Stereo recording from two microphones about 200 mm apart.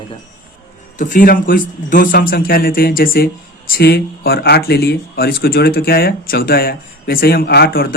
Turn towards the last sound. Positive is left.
turn(degrees=50)  # may be behind; listen again after turning